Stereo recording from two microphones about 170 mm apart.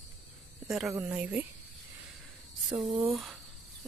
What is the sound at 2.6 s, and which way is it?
Speech, 5° right (ahead or behind).